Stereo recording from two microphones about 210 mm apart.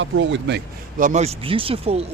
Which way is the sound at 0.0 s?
60° right (ahead or behind).